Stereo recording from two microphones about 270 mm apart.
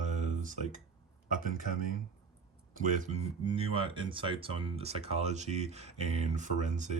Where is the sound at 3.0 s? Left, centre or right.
Right.